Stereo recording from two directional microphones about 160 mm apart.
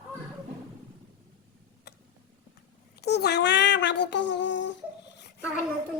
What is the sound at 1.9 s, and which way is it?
Tick-tock, 90° left.